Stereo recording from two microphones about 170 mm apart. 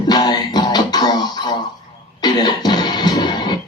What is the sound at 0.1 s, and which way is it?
Music, 25° left (ahead or behind).